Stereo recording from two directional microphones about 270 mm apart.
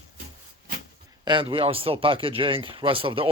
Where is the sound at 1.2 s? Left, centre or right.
Centre.